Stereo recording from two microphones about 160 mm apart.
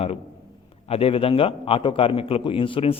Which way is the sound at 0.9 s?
35° left (ahead or behind).